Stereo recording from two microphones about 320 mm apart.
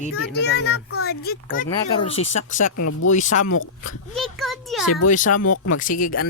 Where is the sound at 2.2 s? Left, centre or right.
Left.